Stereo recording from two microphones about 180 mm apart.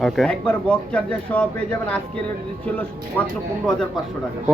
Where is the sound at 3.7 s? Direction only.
5° left (ahead or behind).